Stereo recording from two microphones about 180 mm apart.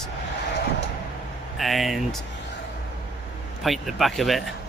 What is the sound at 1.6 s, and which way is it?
Speech, centre (ahead or behind).